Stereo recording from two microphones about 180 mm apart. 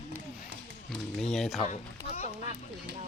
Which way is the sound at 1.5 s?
35° left (ahead or behind).